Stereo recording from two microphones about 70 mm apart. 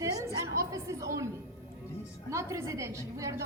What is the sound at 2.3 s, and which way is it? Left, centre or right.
A woman's voice, right.